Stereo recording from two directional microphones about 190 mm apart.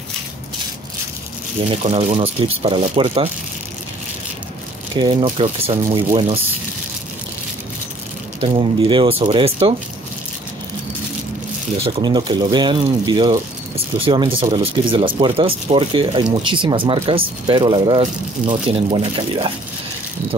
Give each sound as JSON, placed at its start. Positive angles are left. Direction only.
{"t": 1.7, "sound": "speech", "side_deg": -35}
{"t": 5.0, "sound": "speech", "side_deg": -30}
{"t": 8.4, "sound": "speech", "side_deg": -30}
{"t": 11.8, "sound": "speech", "side_deg": -25}
{"t": 18.0, "sound": "speech", "side_deg": -35}